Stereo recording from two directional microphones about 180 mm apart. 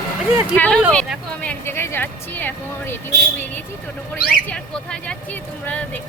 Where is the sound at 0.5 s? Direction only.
10° left (ahead or behind).